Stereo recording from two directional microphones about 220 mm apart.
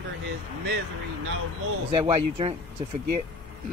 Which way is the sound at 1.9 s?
25° right (ahead or behind).